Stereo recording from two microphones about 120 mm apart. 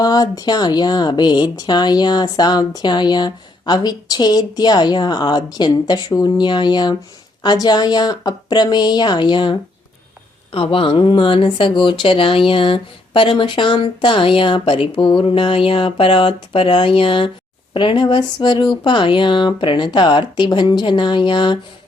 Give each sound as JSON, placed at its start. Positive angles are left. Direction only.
{"t": 0.0, "sound": "speech", "side_deg": 35}